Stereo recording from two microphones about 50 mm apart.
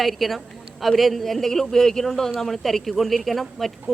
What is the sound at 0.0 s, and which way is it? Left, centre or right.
A man's voice, centre.